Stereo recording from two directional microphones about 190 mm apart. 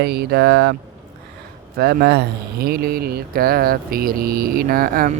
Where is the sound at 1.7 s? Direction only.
55° right (ahead or behind).